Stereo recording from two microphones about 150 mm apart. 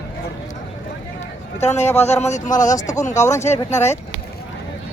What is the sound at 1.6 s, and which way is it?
A man's voice, 50° left (ahead or behind).